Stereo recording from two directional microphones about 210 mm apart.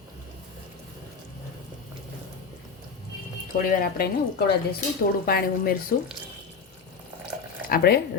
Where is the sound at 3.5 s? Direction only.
40° left (ahead or behind).